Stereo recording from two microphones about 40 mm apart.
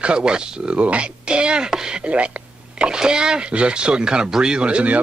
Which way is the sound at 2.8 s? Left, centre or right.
Centre.